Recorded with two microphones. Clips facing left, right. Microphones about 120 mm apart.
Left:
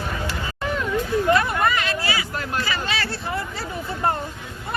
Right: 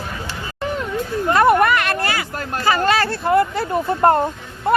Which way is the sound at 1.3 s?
50° right (ahead or behind).